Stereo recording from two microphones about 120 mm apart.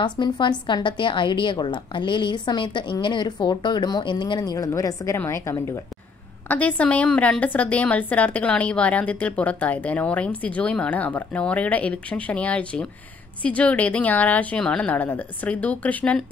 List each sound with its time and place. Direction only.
0.0 s a woman's voice: 40° left (ahead or behind); by 16.3 s 10° left (ahead or behind)